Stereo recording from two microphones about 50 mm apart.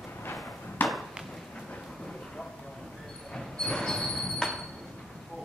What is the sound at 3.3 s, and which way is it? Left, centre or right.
Train, centre.